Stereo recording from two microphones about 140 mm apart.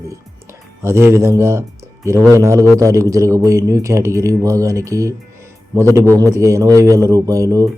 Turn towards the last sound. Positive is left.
turn(degrees=-25)  # may be behind; listen again after turning